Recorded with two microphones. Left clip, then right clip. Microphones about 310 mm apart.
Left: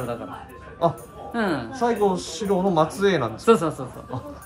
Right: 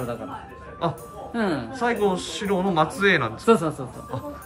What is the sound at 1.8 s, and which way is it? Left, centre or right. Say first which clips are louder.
Speech: left 1 dB; centre.